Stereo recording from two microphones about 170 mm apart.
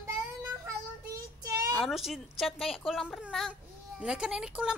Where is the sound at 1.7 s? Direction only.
Centre (ahead or behind).